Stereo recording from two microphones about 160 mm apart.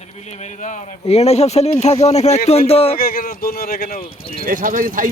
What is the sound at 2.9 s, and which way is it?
Speech, 65° left (ahead or behind).